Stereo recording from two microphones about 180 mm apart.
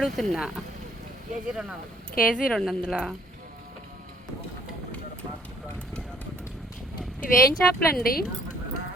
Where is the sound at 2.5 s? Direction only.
Centre (ahead or behind).